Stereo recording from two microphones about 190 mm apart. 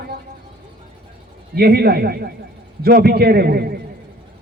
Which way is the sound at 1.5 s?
55° right (ahead or behind).